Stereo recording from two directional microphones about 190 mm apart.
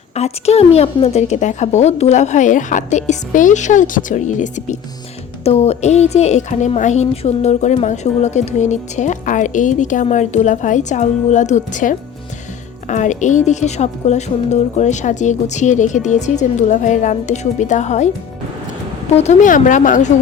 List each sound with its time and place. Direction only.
0.1 s a woman's voice: 35° left (ahead or behind)
19.1 s a woman's voice: 35° left (ahead or behind)